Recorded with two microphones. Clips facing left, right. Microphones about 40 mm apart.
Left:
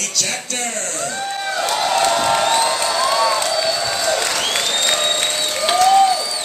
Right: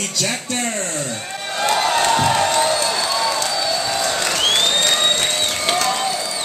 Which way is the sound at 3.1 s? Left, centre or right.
Left.